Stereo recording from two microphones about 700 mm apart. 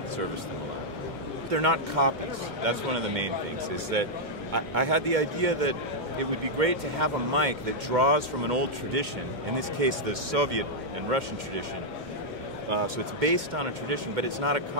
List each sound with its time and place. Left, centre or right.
1.5 s speech: right
12.8 s speech: right